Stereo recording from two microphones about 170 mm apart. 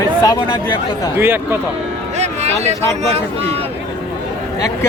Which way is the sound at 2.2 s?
40° right (ahead or behind).